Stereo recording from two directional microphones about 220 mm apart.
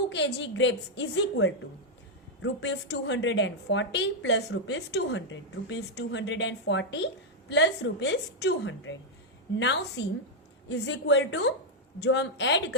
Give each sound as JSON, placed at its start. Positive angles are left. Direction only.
{"t": 0.1, "sound": "a woman's voice", "side_deg": 50}